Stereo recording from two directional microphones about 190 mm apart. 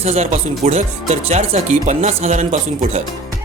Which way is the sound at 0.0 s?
35° right (ahead or behind).